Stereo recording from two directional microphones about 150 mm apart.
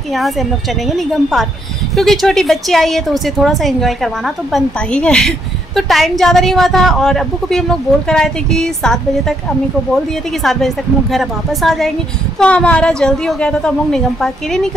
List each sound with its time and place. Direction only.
0.1 s a woman's voice: centre (ahead or behind)
10.4 s a woman's voice: centre (ahead or behind)